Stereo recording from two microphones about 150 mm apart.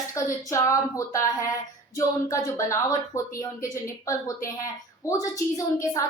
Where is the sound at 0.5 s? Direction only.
20° left (ahead or behind).